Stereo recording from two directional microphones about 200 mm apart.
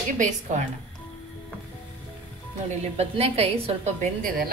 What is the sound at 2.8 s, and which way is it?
A woman's voice, 30° right (ahead or behind).